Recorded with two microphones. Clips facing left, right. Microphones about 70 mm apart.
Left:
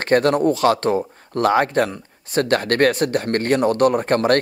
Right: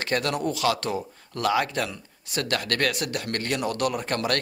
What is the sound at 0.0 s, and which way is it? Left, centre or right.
Speech, left.